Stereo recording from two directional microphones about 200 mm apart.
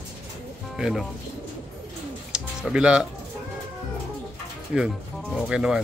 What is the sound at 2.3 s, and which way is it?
Music, 5° right (ahead or behind).